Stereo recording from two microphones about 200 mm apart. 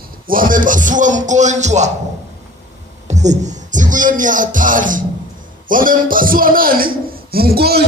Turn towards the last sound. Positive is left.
turn(degrees=-50)  # may be behind; listen again after turning